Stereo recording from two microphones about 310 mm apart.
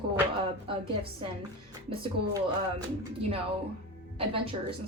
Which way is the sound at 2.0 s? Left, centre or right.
Centre.